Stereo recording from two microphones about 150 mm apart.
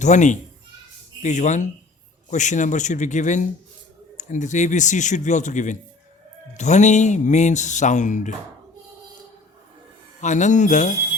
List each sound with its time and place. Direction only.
0.0 s speech: 55° left (ahead or behind)
10.2 s speech: 55° left (ahead or behind)